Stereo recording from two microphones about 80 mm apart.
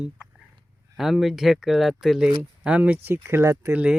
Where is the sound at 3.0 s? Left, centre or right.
Right.